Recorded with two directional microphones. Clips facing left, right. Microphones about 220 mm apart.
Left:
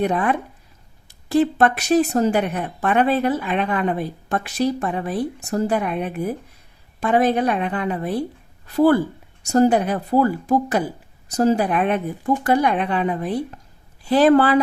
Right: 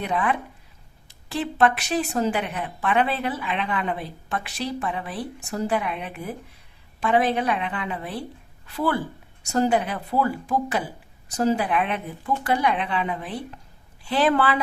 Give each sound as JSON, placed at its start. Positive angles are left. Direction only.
{"t": 0.0, "sound": "a woman's voice", "side_deg": 45}